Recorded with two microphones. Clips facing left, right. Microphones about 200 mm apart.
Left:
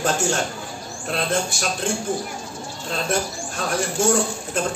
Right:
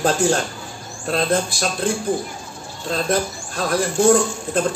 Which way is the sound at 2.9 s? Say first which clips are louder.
Right 4 dB; 35° right (ahead or behind).